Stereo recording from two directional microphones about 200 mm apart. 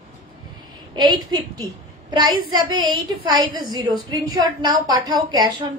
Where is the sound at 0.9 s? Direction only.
20° right (ahead or behind).